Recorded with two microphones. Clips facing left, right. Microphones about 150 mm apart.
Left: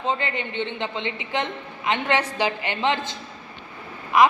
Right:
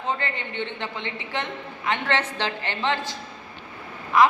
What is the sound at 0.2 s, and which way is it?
A woman's voice, 20° left (ahead or behind).